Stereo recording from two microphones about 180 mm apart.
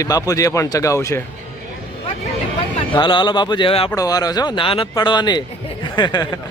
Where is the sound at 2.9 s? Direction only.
25° left (ahead or behind).